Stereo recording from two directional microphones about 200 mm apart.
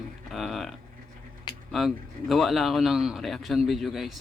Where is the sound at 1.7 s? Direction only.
Centre (ahead or behind).